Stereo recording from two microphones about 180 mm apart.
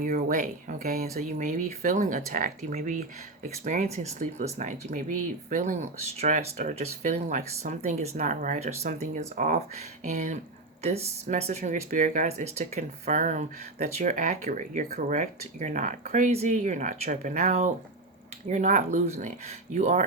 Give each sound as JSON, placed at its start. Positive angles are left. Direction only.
{"t": 0.0, "sound": "speech", "side_deg": -50}